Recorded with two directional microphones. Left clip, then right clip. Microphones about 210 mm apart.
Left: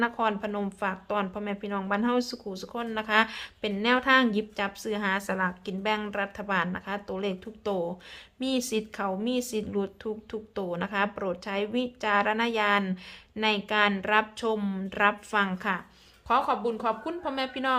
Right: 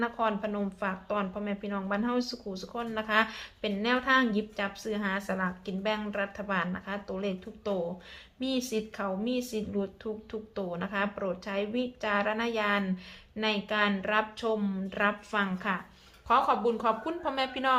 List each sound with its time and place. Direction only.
0.0 s a woman's voice: 35° left (ahead or behind)
16.3 s a woman's voice: 20° left (ahead or behind)